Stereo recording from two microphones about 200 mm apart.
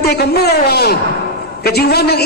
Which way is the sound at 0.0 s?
55° left (ahead or behind).